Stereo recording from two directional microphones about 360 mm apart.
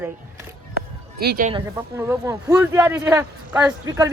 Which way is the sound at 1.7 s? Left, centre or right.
Centre.